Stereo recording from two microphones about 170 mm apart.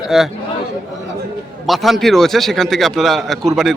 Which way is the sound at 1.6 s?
Centre (ahead or behind).